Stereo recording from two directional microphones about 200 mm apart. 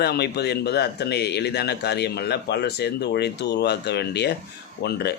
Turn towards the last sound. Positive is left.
turn(degrees=55)  # may be behind; listen again after turning